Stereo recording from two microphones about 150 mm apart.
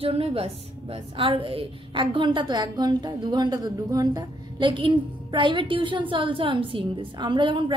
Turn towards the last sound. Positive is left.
turn(degrees=-30)  # may be behind; listen again after turning